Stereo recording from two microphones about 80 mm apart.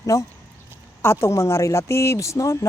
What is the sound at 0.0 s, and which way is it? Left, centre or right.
Speech, left.